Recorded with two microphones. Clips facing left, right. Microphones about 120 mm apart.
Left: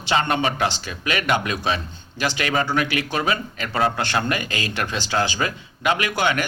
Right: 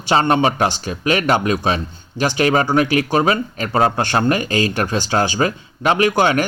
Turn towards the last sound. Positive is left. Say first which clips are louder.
# right 7 dB
turn(degrees=-35)  # may be behind; listen again after turning